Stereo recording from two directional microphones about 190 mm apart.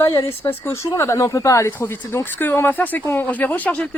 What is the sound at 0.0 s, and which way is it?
Speech, 20° left (ahead or behind).